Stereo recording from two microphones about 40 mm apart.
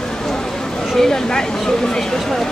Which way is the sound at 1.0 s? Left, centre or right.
Centre.